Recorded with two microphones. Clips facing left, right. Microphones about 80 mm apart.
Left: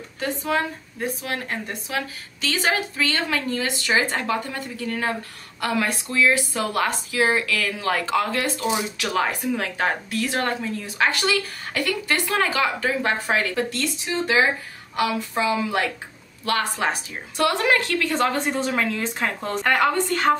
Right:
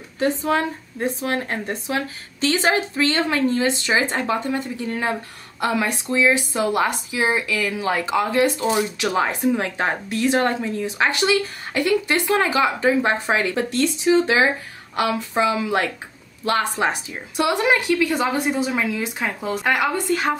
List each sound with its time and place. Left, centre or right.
0.2 s a woman's voice: right; by 20.3 s centre